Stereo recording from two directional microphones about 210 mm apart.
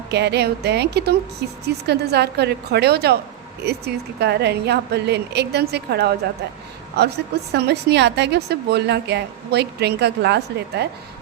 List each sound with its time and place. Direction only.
0.1 s a woman's voice: 55° right (ahead or behind)